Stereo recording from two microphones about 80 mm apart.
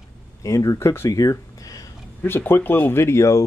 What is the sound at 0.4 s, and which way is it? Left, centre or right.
Speech, left.